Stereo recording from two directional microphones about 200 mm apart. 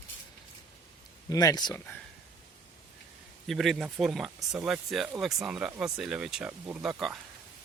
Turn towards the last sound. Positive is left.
turn(degrees=0)  # may be behind; listen again after turning